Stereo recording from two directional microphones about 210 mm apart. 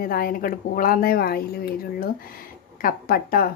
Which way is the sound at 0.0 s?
45° left (ahead or behind).